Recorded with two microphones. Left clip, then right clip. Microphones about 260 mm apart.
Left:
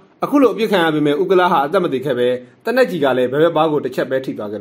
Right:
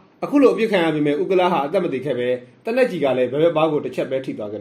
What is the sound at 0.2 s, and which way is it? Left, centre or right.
A man's voice, left.